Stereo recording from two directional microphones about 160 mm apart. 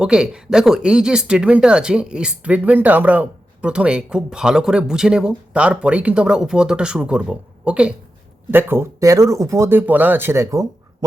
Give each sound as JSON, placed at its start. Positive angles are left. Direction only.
{"t": 0.0, "sound": "speech", "side_deg": -5}